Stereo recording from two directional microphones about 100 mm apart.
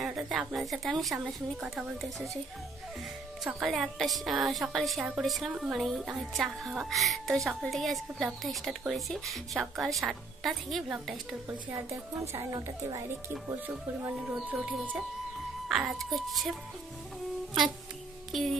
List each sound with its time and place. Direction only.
0.3 s a woman's voice: 5° right (ahead or behind)
3.5 s a woman's voice: centre (ahead or behind)
11.7 s a woman's voice: 30° right (ahead or behind)
13.3 s speech: 20° right (ahead or behind)
14.2 s speech: 5° right (ahead or behind)
15.7 s a woman's voice: centre (ahead or behind)
18.3 s a sound: centre (ahead or behind)